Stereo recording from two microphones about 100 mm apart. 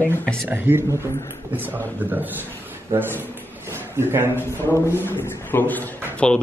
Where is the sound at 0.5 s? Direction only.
20° right (ahead or behind).